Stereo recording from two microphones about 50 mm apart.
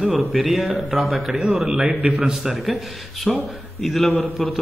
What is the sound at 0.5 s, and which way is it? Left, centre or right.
A man's voice, centre.